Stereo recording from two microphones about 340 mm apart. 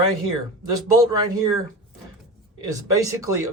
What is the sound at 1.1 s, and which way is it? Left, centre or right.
Speech, centre.